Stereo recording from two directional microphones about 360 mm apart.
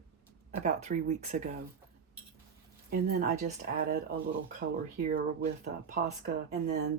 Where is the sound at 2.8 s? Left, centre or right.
Right.